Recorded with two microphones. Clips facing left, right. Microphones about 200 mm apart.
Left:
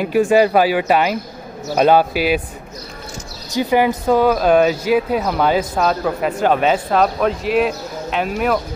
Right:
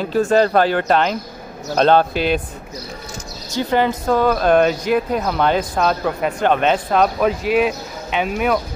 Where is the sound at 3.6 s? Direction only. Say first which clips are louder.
Left 2 dB; 10° left (ahead or behind).